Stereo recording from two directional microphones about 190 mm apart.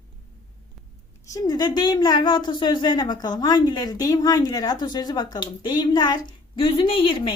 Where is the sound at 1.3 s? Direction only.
20° left (ahead or behind).